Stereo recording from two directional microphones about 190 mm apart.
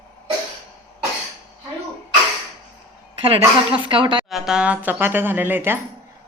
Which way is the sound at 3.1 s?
30° right (ahead or behind).